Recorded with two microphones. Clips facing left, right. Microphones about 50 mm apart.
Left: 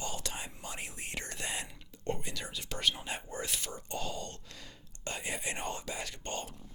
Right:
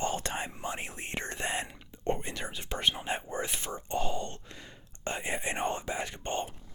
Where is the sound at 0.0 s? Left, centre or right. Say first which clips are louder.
Right 7 dB; right.